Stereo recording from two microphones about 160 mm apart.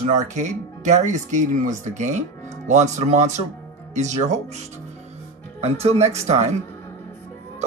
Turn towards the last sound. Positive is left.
turn(degrees=-45)  # may be behind; listen again after turning